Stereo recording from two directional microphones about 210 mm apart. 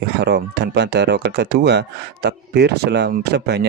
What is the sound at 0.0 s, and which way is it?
Speech, 50° right (ahead or behind).